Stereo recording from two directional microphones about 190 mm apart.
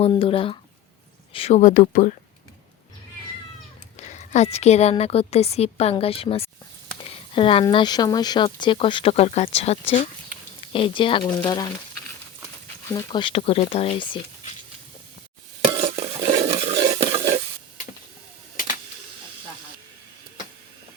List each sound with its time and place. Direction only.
0.0 s a woman's voice: 30° left (ahead or behind)
3.9 s a woman's voice: 35° left (ahead or behind)
12.9 s speech: 25° left (ahead or behind)
16.0 s stir: 45° right (ahead or behind)
16.5 s stir: 30° right (ahead or behind)